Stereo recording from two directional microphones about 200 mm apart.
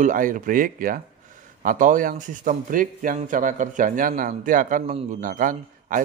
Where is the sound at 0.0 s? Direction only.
40° right (ahead or behind).